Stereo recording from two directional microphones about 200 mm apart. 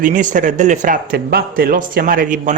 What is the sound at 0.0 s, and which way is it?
Speech, 40° right (ahead or behind).